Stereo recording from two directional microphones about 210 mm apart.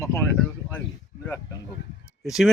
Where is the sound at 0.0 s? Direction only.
15° left (ahead or behind).